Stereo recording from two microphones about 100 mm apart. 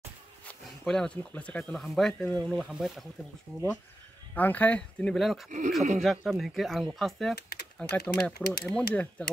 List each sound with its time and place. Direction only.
0.8 s speech: 10° left (ahead or behind)
2.5 s speech: 5° right (ahead or behind)
4.4 s speech: 15° left (ahead or behind)
5.1 s speech: centre (ahead or behind)